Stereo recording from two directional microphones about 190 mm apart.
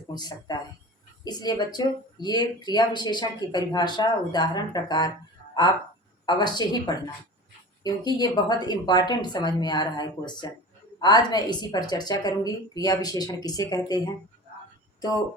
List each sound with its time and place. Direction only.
0.1 s a woman's voice: 20° left (ahead or behind)
6.2 s a woman's voice: 25° left (ahead or behind)